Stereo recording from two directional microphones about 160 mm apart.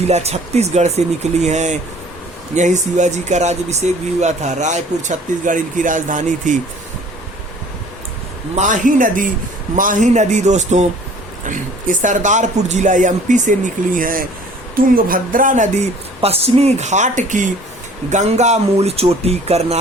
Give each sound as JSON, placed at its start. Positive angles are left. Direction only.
{"t": 0.1, "sound": "speech", "side_deg": -40}
{"t": 8.5, "sound": "a man's voice", "side_deg": -50}